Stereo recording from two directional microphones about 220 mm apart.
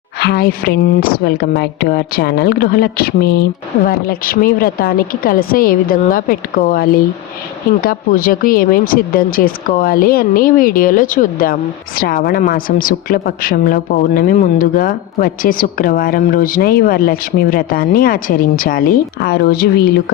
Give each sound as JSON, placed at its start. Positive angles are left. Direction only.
{"t": 0.2, "sound": "a woman's voice", "side_deg": 45}